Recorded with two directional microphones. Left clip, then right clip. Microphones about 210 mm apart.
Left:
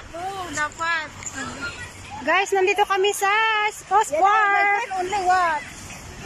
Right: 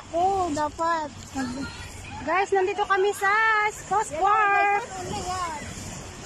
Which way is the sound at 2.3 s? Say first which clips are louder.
Left 4 dB; centre (ahead or behind).